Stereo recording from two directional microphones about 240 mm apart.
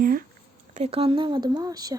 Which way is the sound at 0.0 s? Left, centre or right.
Right.